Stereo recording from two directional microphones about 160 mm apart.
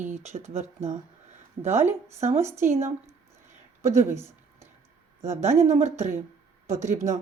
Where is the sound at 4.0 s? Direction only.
15° right (ahead or behind).